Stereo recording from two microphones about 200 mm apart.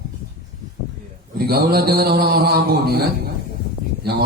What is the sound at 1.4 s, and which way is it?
A man's voice, 50° right (ahead or behind).